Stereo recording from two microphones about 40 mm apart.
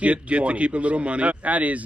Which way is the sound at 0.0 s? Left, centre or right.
Right.